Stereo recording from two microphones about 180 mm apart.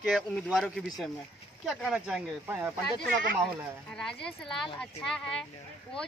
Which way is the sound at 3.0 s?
50° right (ahead or behind).